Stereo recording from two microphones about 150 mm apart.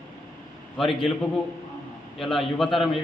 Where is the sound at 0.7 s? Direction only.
Centre (ahead or behind).